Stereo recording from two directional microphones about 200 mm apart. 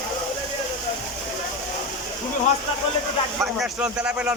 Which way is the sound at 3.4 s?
5° right (ahead or behind).